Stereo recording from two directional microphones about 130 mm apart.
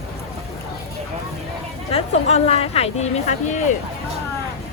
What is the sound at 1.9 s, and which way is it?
Speech, 55° left (ahead or behind).